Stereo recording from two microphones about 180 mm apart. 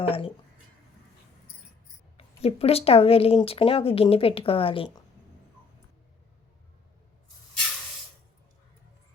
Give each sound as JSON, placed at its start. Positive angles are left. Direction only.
{"t": 0.1, "sound": "speech", "side_deg": 30}
{"t": 2.1, "sound": "speech", "side_deg": 35}